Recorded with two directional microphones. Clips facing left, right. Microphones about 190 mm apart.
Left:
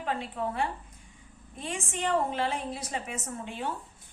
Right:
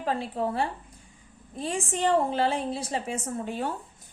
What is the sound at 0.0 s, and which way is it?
A woman's voice, 35° right (ahead or behind).